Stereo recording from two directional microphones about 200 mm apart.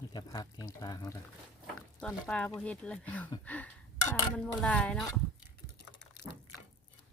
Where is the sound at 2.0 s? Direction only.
5° left (ahead or behind).